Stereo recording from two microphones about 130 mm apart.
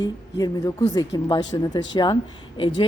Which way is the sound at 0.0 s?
30° left (ahead or behind).